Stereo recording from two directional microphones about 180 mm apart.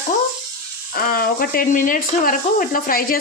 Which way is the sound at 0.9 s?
55° left (ahead or behind).